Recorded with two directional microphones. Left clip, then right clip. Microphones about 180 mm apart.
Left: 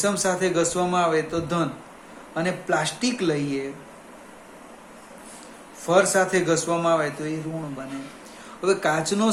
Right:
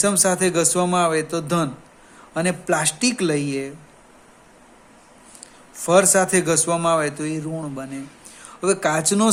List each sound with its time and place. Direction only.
0.0 s a man's voice: 60° right (ahead or behind)
5.8 s a man's voice: 60° right (ahead or behind)
8.4 s a man's voice: 55° right (ahead or behind)